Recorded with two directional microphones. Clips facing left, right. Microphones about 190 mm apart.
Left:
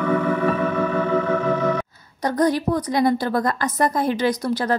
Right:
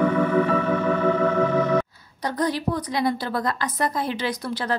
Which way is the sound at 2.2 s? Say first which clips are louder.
Left 5 dB; 45° left (ahead or behind).